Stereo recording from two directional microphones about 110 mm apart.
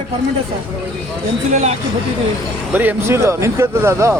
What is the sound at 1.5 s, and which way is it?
Speech, 90° right.